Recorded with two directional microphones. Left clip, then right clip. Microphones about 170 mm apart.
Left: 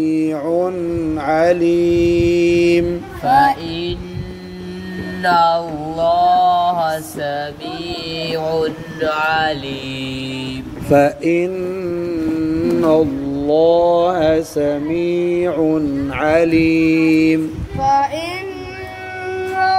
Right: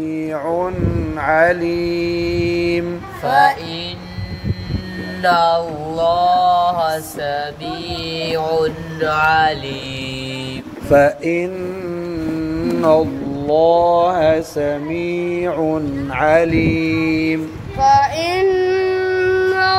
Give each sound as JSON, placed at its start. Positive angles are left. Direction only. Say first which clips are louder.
{"t": 0.0, "sound": "mantra", "louder": "left 6 dB", "side_deg": -5}
{"t": 1.1, "sound": "music", "louder": "right 2 dB", "side_deg": 50}
{"t": 1.7, "sound": "mantra", "louder": "left 5 dB", "side_deg": 0}
{"t": 3.3, "sound": "child singing", "louder": "left 1 dB", "side_deg": -40}
{"t": 5.2, "sound": "mantra", "louder": "even", "side_deg": -35}
{"t": 10.9, "sound": "mantra", "louder": "right 1 dB", "side_deg": 50}
{"t": 17.7, "sound": "child singing", "louder": "right 3 dB", "side_deg": -65}
{"t": 19.2, "sound": "a sound", "louder": "even", "side_deg": -70}